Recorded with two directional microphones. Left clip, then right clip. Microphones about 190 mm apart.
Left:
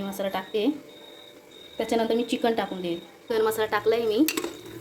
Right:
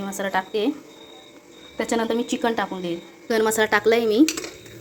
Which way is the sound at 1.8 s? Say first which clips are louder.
Right 1 dB; 5° right (ahead or behind).